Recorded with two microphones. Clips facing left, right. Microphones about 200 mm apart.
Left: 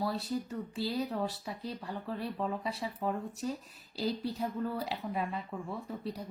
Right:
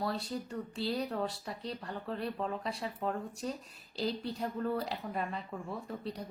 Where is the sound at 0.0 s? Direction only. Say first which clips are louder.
Left 2 dB; centre (ahead or behind).